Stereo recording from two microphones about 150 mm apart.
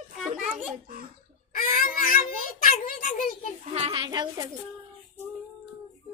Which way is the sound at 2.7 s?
65° left (ahead or behind).